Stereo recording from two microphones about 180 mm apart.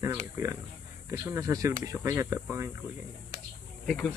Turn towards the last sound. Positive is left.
turn(degrees=5)  # may be behind; listen again after turning